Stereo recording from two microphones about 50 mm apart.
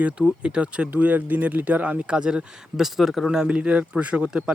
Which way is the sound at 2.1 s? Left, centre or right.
Centre.